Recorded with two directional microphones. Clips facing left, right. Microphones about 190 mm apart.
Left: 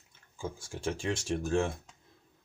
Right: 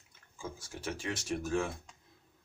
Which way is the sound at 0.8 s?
30° left (ahead or behind).